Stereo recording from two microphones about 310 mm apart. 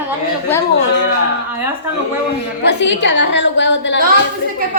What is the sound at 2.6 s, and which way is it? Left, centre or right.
A woman's voice, left.